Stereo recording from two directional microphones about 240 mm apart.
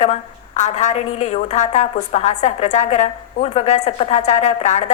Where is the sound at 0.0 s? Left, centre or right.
Left.